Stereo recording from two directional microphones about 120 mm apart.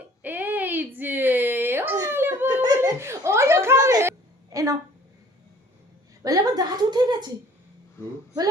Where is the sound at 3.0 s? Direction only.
25° right (ahead or behind).